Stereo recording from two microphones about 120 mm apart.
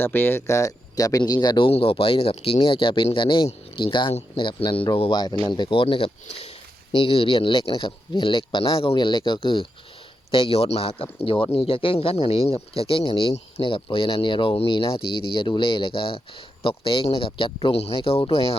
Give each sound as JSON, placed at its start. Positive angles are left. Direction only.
{"t": 0.0, "sound": "speech", "side_deg": 20}
{"t": 6.2, "sound": "speech", "side_deg": 60}
{"t": 6.9, "sound": "speech", "side_deg": 50}